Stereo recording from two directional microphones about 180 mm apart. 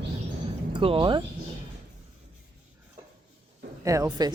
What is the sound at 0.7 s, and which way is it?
Speech, 30° right (ahead or behind).